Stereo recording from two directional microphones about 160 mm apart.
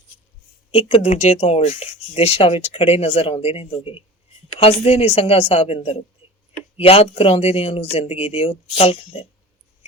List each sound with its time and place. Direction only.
0.7 s speech: 40° left (ahead or behind)